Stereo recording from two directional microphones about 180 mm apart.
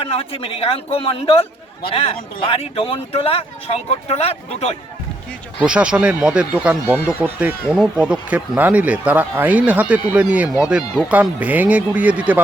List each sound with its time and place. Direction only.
0.0 s speech: 30° left (ahead or behind)
5.5 s speech: 5° right (ahead or behind)